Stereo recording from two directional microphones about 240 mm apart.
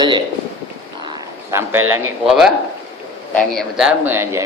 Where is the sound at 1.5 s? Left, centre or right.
Centre.